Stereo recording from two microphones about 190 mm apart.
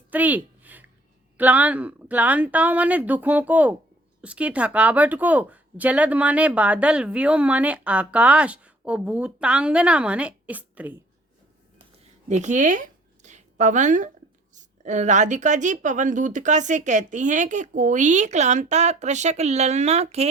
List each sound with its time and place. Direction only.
0.1 s a sound: 10° right (ahead or behind)
1.4 s speech: 10° right (ahead or behind)
12.3 s a woman's voice: 40° right (ahead or behind)